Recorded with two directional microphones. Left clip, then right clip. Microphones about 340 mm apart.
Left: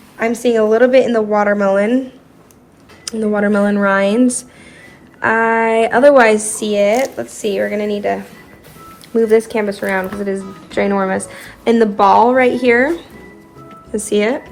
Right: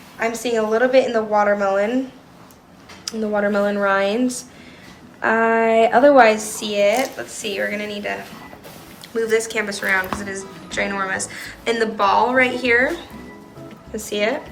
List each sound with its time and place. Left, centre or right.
0.2 s speech: left
3.1 s a woman's voice: left
10.4 s a woman's voice: centre
10.8 s a woman's voice: centre
13.9 s speech: left